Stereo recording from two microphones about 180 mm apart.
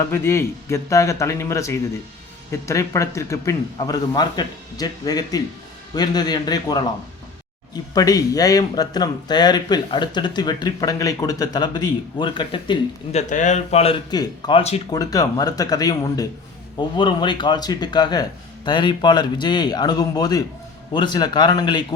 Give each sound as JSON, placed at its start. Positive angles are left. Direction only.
{"t": 0.1, "sound": "a man's voice", "side_deg": 15}
{"t": 13.1, "sound": "a man's voice", "side_deg": 40}
{"t": 14.1, "sound": "speech", "side_deg": 25}